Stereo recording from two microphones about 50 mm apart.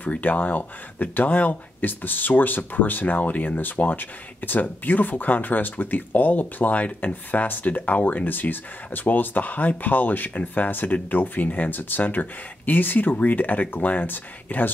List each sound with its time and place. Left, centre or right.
0.0 s speech: left